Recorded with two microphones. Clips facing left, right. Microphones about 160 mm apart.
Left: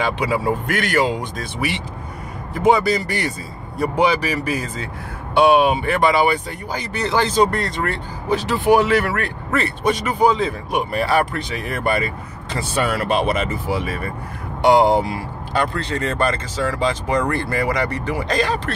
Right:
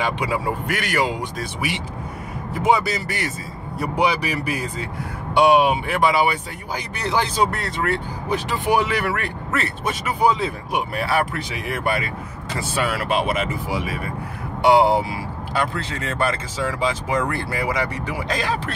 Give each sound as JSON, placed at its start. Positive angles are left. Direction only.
{"t": 0.7, "sound": "speech", "side_deg": -10}
{"t": 8.5, "sound": "speech", "side_deg": -15}
{"t": 9.5, "sound": "speech", "side_deg": -5}